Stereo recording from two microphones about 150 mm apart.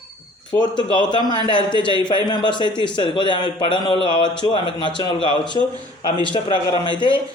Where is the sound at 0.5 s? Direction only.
30° left (ahead or behind).